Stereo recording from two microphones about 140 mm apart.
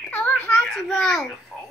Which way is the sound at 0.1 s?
10° left (ahead or behind).